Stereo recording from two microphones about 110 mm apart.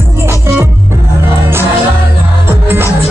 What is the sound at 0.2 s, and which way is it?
Music, 20° right (ahead or behind).